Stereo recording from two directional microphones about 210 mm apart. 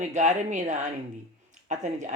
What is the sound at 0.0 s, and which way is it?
Speech, 35° right (ahead or behind).